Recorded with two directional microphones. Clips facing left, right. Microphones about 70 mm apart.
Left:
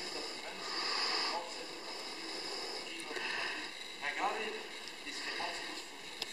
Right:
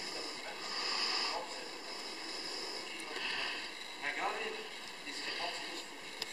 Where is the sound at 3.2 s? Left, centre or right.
Centre.